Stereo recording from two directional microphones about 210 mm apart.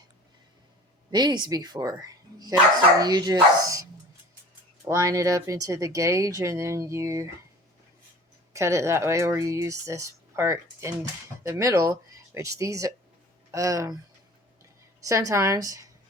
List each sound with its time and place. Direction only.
1.1 s speech: 20° right (ahead or behind)
4.9 s speech: 15° right (ahead or behind)
8.5 s speech: 15° right (ahead or behind)
15.0 s speech: 15° right (ahead or behind)